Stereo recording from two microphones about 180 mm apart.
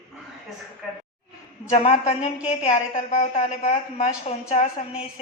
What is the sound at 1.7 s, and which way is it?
A woman's voice, 35° left (ahead or behind).